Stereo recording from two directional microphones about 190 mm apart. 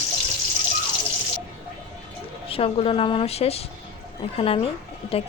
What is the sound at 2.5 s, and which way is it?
A woman's voice, 30° left (ahead or behind).